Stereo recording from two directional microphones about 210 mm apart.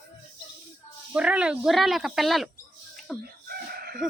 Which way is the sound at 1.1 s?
5° right (ahead or behind).